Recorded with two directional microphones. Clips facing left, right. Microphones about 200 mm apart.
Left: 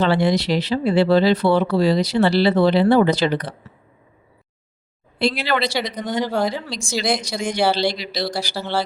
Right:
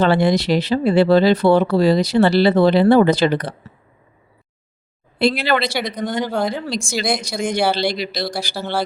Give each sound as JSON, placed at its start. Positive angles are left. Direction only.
{"t": 0.0, "sound": "speech", "side_deg": -50}
{"t": 5.2, "sound": "speech", "side_deg": -55}
{"t": 6.1, "sound": "speech", "side_deg": 0}
{"t": 6.5, "sound": "speech", "side_deg": -50}